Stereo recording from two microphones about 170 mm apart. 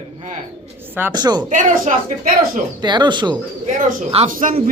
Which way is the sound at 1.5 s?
50° right (ahead or behind).